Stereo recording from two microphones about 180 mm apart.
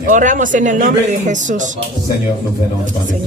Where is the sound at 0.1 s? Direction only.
45° right (ahead or behind).